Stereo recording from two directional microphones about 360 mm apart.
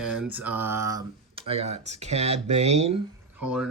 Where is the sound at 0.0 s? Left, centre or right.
Centre.